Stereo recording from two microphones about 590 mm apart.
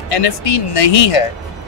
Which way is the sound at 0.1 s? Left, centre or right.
Left.